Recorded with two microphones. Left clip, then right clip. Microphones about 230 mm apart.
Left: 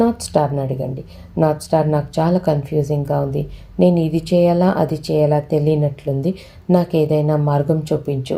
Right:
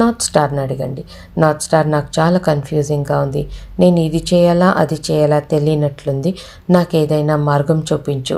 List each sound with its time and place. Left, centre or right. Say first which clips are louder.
0.0 s speech: right 3 dB; right